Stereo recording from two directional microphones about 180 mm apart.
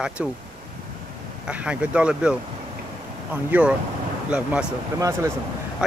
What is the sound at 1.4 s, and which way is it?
Speech, 5° right (ahead or behind).